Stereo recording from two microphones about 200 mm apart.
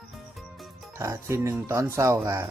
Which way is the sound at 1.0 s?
15° right (ahead or behind).